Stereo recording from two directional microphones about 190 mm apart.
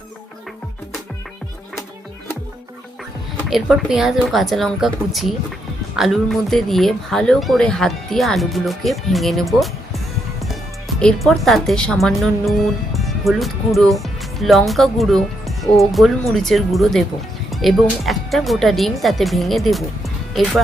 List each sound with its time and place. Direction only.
3.5 s a woman's voice: centre (ahead or behind)
11.0 s a woman's voice: centre (ahead or behind)